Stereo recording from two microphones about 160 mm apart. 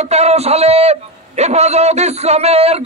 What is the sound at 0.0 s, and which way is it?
A man's voice, 40° right (ahead or behind).